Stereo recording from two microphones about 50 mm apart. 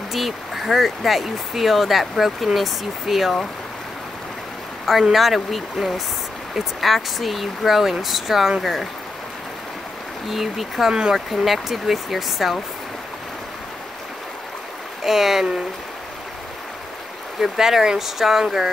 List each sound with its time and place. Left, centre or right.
0.1 s speech: centre
4.8 s speech: centre
10.3 s speech: centre
15.0 s speech: centre
17.4 s speech: centre